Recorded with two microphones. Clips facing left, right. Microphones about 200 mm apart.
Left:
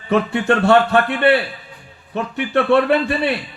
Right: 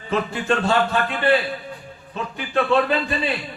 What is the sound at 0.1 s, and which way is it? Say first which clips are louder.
A man's voice: left 5 dB; 65° left (ahead or behind).